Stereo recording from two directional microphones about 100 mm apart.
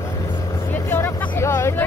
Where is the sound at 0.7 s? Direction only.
20° left (ahead or behind).